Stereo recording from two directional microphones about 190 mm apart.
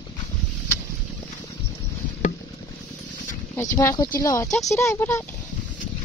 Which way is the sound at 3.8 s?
15° left (ahead or behind).